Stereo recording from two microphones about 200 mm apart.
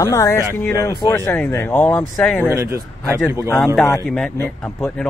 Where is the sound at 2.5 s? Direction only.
15° right (ahead or behind).